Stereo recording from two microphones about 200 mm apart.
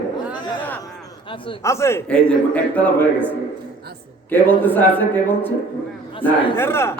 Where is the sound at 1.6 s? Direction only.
15° left (ahead or behind).